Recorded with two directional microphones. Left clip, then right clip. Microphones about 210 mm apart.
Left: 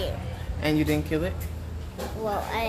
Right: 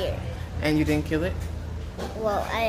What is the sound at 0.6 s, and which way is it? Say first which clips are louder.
Speech: right 1 dB; 10° left (ahead or behind).